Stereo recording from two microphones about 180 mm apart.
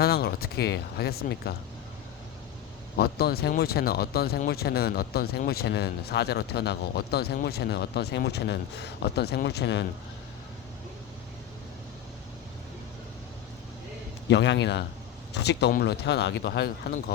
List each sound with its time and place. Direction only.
0.0 s speech: 60° left (ahead or behind)
2.9 s speech: 60° left (ahead or behind)
14.3 s speech: 75° left (ahead or behind)